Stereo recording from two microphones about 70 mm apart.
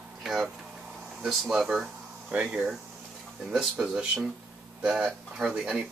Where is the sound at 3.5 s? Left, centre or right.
Centre.